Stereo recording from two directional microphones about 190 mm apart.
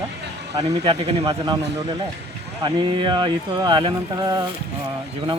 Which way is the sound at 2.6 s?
25° right (ahead or behind).